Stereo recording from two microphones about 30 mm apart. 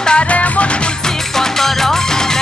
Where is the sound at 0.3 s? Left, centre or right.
Left.